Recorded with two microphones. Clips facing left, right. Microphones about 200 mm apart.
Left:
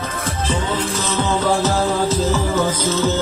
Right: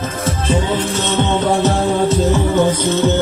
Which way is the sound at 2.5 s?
15° right (ahead or behind).